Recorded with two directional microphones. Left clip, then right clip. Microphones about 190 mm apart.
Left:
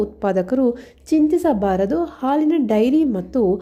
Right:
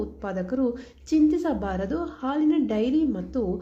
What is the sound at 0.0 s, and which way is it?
A woman's voice, 40° left (ahead or behind).